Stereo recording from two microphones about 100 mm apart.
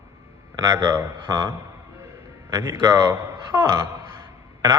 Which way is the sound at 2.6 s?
30° right (ahead or behind).